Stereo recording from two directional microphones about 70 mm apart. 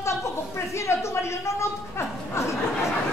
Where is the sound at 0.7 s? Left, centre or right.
Left.